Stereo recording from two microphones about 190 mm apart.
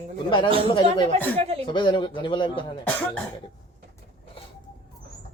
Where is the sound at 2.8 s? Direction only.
10° left (ahead or behind).